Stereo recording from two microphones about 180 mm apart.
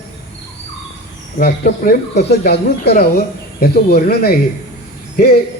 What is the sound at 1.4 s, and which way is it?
A man's voice, 60° left (ahead or behind).